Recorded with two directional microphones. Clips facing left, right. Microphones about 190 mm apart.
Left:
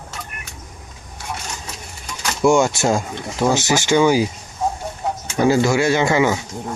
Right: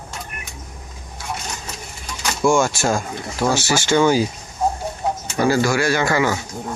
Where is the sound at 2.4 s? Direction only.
20° left (ahead or behind).